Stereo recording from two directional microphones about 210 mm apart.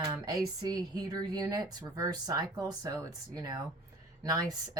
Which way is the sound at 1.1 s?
15° right (ahead or behind).